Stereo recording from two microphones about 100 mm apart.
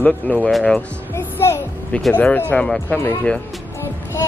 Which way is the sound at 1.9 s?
10° left (ahead or behind).